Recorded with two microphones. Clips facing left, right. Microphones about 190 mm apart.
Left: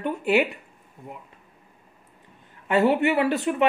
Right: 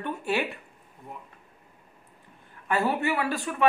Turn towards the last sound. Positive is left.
turn(degrees=20)  # may be behind; listen again after turning